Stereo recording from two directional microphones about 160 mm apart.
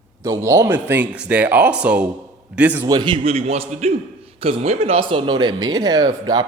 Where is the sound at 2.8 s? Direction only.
25° right (ahead or behind).